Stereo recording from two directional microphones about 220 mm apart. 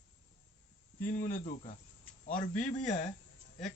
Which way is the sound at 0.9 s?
40° left (ahead or behind).